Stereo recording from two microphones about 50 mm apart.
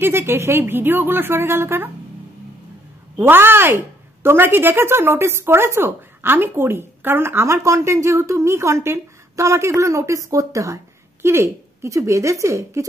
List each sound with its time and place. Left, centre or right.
0.0 s speech: right
3.2 s a woman's voice: right
11.2 s speech: right